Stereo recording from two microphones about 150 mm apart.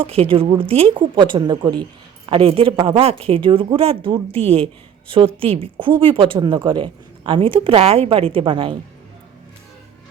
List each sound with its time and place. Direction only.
0.0 s speech: 40° right (ahead or behind)